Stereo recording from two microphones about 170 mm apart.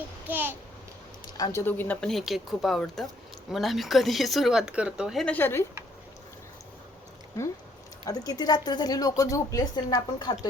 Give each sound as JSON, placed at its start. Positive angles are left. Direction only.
{"t": 0.3, "sound": "a child's voice", "side_deg": -10}
{"t": 1.4, "sound": "speech", "side_deg": 15}
{"t": 8.0, "sound": "speech", "side_deg": 20}